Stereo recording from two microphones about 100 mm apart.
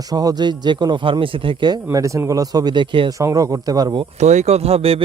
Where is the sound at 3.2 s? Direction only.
30° right (ahead or behind).